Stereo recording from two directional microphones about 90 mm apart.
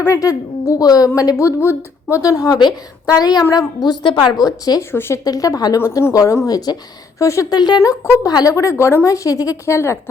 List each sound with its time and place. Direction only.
0.0 s a woman's voice: 35° left (ahead or behind)
4.8 s speech: 25° left (ahead or behind)
5.2 s a woman's voice: 40° left (ahead or behind)
7.5 s a woman's voice: 50° left (ahead or behind); by 10.0 s 30° left (ahead or behind)